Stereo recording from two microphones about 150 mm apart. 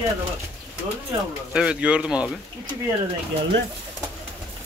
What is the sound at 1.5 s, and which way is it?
Speech, 5° right (ahead or behind).